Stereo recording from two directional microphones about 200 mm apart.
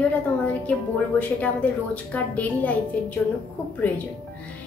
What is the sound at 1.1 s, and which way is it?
A woman's voice, 5° left (ahead or behind).